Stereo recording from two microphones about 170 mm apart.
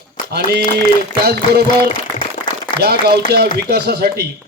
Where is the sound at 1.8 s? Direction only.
30° left (ahead or behind).